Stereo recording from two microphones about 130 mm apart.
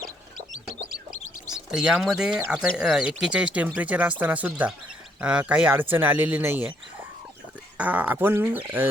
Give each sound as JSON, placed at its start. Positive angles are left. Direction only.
{"t": 0.7, "sound": "chicken", "side_deg": 75}
{"t": 1.5, "sound": "speech", "side_deg": -5}
{"t": 7.8, "sound": "speech", "side_deg": -15}